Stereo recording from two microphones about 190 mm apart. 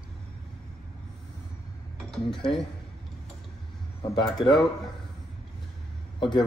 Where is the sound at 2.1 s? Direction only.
Centre (ahead or behind).